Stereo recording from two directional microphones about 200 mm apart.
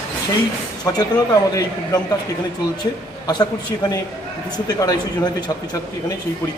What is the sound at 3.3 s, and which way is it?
A man's voice, 20° left (ahead or behind).